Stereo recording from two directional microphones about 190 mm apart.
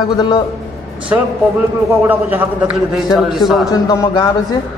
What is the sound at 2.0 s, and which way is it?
A man's voice, 10° right (ahead or behind).